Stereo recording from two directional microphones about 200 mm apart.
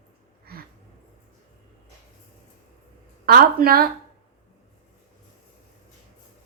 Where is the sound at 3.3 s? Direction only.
50° right (ahead or behind).